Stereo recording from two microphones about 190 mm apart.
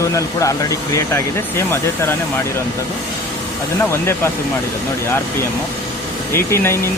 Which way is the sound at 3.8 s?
10° left (ahead or behind).